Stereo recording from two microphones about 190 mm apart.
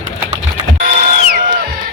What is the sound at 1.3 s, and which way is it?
Music, 55° right (ahead or behind).